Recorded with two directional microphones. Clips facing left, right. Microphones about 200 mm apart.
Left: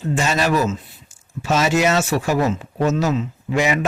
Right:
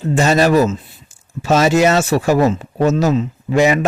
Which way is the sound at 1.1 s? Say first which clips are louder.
Right 1 dB; 35° right (ahead or behind).